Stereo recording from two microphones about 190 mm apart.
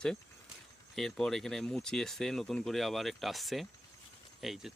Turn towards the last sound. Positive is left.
turn(degrees=0)  # may be behind; listen again after turning